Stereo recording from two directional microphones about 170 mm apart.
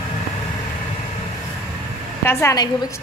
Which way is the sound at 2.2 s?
15° left (ahead or behind).